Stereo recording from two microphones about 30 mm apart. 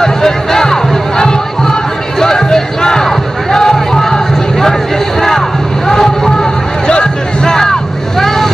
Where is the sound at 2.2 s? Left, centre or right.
Centre.